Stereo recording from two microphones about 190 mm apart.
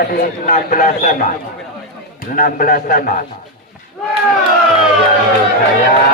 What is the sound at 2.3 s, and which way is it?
Speech, 45° left (ahead or behind).